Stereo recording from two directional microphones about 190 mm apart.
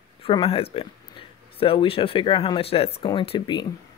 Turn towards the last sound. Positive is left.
turn(degrees=25)  # may be behind; listen again after turning